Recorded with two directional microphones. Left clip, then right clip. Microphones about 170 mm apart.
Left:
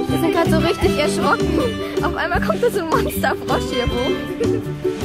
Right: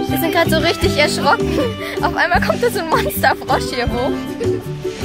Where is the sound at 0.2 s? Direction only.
5° right (ahead or behind).